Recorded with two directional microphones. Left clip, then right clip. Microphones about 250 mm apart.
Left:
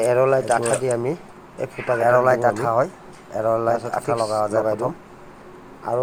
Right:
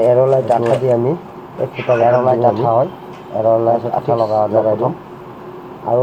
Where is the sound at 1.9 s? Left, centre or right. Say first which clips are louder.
Right 4 dB; left.